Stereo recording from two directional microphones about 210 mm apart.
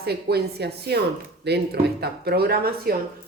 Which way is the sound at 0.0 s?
50° right (ahead or behind).